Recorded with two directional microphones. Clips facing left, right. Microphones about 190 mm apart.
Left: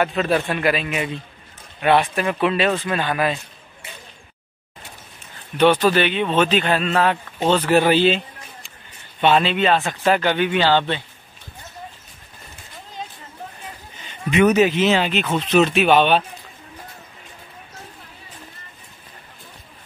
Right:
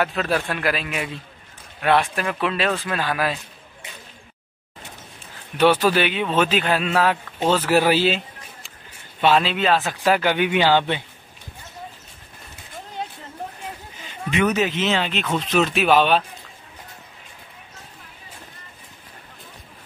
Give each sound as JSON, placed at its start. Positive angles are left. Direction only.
{"t": 0.0, "sound": "speech", "side_deg": 0}
{"t": 5.6, "sound": "speech", "side_deg": -5}
{"t": 9.2, "sound": "speech", "side_deg": 0}
{"t": 12.7, "sound": "a sound", "side_deg": -65}
{"t": 14.3, "sound": "speech", "side_deg": 15}